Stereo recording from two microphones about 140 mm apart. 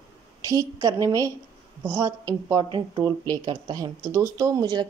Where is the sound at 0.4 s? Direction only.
25° right (ahead or behind).